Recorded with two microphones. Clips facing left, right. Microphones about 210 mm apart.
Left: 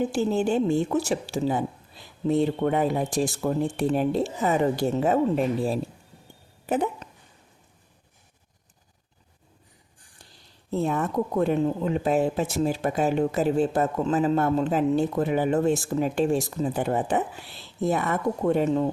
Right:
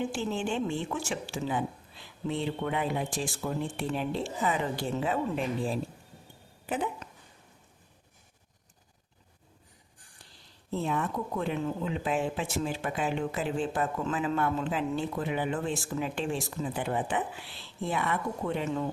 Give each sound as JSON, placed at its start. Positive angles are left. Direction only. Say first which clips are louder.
{"t": 0.0, "sound": "speech", "louder": "left 8 dB", "side_deg": 40}
{"t": 10.7, "sound": "speech", "louder": "left 5 dB", "side_deg": 45}